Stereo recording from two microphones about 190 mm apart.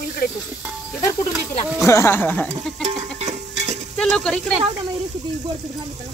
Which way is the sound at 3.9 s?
5° left (ahead or behind).